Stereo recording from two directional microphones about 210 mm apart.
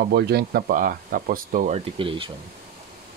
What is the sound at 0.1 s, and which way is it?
Speech, 50° right (ahead or behind).